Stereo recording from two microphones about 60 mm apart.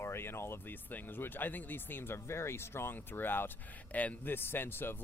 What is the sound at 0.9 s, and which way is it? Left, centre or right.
Speech, left.